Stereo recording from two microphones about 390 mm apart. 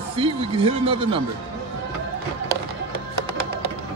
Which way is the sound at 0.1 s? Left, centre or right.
Centre.